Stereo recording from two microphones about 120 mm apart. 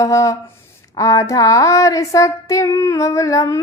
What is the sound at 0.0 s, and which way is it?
Female singing, 25° left (ahead or behind).